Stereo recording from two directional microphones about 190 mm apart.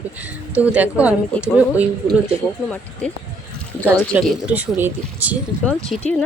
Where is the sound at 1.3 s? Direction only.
10° left (ahead or behind).